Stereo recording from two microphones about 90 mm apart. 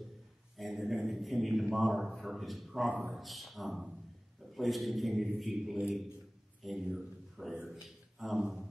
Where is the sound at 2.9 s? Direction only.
15° right (ahead or behind).